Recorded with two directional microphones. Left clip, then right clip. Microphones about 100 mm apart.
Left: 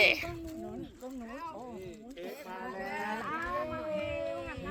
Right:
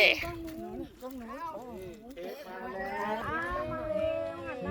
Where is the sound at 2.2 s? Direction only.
10° right (ahead or behind).